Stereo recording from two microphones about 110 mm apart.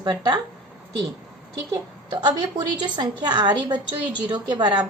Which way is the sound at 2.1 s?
40° right (ahead or behind).